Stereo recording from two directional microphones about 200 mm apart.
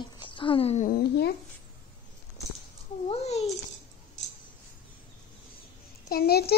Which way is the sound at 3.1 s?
30° left (ahead or behind).